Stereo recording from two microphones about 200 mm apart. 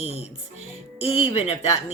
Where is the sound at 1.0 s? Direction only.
30° left (ahead or behind).